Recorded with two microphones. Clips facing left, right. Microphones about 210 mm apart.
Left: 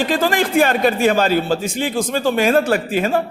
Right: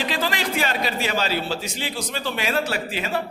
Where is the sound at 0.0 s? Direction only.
50° left (ahead or behind).